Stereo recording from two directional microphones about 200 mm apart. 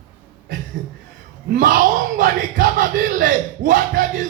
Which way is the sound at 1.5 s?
40° right (ahead or behind).